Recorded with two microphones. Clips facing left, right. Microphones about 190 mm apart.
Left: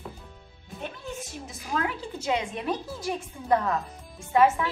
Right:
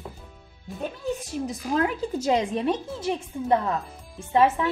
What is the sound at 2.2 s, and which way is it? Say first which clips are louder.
A woman's voice: right 4 dB; 35° right (ahead or behind).